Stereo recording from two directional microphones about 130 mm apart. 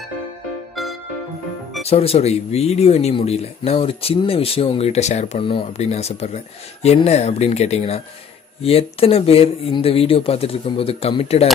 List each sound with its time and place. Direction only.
1.9 s speech: 50° left (ahead or behind)
5.4 s speech: 40° left (ahead or behind)
5.8 s a man's voice: 55° left (ahead or behind)